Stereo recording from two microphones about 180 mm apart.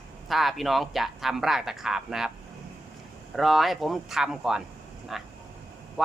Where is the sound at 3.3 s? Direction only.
Centre (ahead or behind).